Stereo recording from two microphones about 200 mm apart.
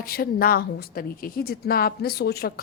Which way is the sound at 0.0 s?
50° left (ahead or behind).